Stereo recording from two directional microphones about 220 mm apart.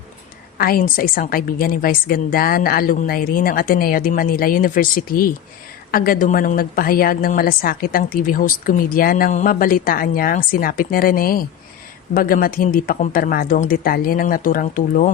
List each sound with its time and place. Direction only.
0.6 s speech: 40° left (ahead or behind)